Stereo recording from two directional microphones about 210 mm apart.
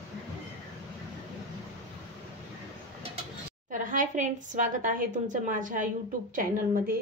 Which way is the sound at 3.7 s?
35° right (ahead or behind).